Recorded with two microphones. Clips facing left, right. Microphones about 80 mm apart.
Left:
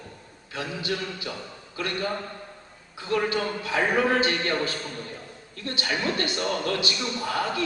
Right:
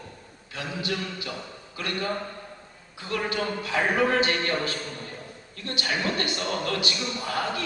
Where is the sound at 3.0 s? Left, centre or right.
Left.